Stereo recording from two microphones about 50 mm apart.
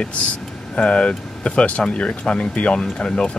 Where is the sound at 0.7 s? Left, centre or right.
Left.